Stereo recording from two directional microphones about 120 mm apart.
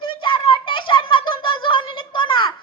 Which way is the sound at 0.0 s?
40° left (ahead or behind).